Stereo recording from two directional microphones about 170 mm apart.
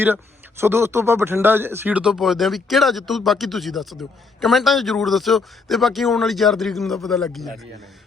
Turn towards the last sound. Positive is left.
turn(degrees=0)  # may be behind; listen again after turning